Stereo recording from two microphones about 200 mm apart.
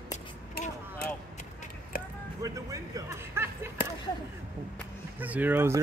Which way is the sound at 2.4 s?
15° right (ahead or behind).